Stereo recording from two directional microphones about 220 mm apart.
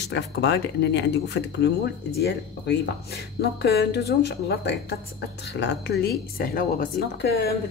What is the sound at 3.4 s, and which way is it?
A woman's voice, 45° left (ahead or behind).